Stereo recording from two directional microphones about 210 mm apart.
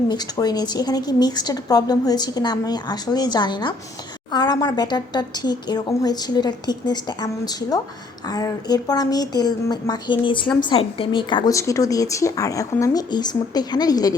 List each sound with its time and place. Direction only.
0.1 s a woman's voice: 20° left (ahead or behind)